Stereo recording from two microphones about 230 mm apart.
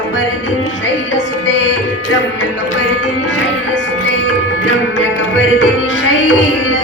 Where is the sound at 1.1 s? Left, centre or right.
Left.